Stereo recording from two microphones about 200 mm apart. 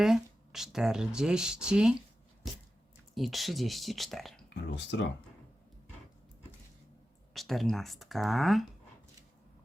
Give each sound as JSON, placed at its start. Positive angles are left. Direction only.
{"t": 0.0, "sound": "speech", "side_deg": 0}
{"t": 4.4, "sound": "speech", "side_deg": 60}
{"t": 7.3, "sound": "speech", "side_deg": 0}